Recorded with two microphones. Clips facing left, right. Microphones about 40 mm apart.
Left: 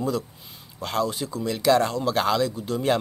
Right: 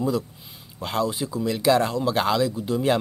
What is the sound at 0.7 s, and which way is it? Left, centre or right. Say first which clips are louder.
Speech: right 1 dB; centre.